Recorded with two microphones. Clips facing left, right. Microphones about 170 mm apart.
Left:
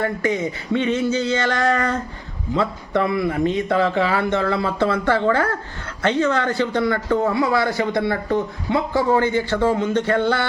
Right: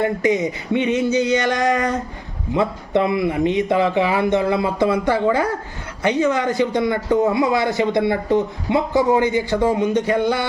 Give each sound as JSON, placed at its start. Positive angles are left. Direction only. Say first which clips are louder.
{"t": 0.0, "sound": "a man's voice", "louder": "right 3 dB", "side_deg": -20}